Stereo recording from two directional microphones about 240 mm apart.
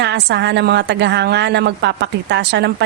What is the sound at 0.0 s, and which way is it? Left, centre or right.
A woman's voice, right.